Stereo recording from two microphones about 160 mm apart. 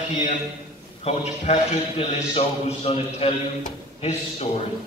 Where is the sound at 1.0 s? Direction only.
40° left (ahead or behind).